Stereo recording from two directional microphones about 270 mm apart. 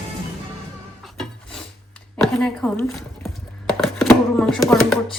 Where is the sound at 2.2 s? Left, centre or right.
Centre.